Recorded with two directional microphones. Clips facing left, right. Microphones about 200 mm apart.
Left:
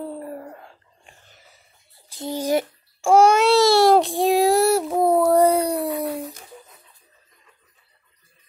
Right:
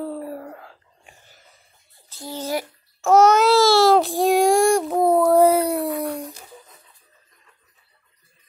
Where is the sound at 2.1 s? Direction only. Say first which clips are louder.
Left 5 dB; 15° left (ahead or behind).